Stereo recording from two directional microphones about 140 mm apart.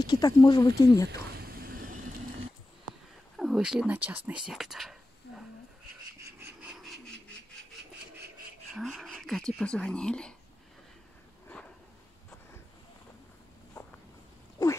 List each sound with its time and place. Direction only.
0.0 s speech: 30° left (ahead or behind)
1.4 s a sound: 90° right
3.3 s speech: centre (ahead or behind)
4.3 s whispering: 5° right (ahead or behind)
6.4 s a sound: 10° right (ahead or behind)
8.7 s speech: centre (ahead or behind)